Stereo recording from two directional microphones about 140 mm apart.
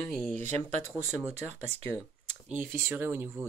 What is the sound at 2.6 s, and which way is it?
Speech, 15° right (ahead or behind).